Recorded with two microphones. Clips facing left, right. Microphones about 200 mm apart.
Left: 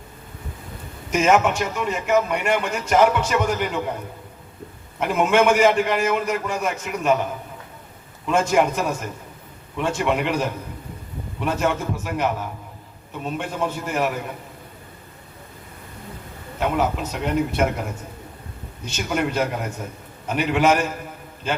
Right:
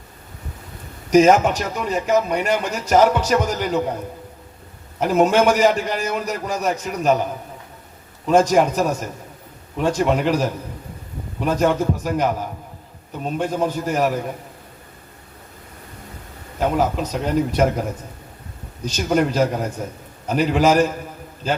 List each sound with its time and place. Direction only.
1.1 s a man's voice: 40° right (ahead or behind)
4.9 s a man's voice: 35° right (ahead or behind)
8.3 s a man's voice: 35° right (ahead or behind)
16.6 s a man's voice: 35° right (ahead or behind)
18.9 s a man's voice: 35° right (ahead or behind)